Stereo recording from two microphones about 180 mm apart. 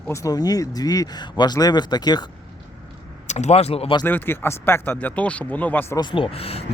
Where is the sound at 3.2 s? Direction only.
40° left (ahead or behind).